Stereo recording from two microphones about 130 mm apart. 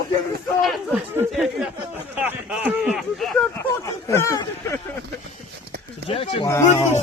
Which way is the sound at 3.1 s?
Centre (ahead or behind).